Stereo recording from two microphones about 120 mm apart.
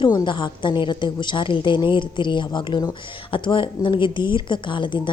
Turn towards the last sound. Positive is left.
turn(degrees=45)  # may be behind; listen again after turning